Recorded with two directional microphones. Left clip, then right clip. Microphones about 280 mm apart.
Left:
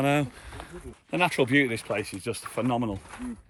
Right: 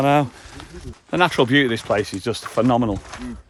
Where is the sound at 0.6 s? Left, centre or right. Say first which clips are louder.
Right 1 dB; left.